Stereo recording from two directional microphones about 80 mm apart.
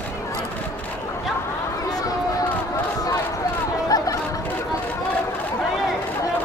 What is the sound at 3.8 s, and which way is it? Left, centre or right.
Chatter, left.